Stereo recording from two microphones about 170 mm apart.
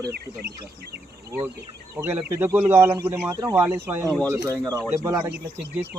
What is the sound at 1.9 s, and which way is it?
A man's voice, 15° right (ahead or behind).